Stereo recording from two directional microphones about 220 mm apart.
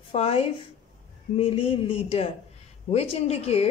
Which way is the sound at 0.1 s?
25° left (ahead or behind).